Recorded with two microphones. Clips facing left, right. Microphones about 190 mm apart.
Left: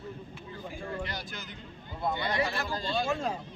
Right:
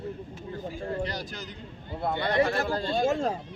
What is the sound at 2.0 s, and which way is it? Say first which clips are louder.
Speech: right 5 dB; 60° right (ahead or behind).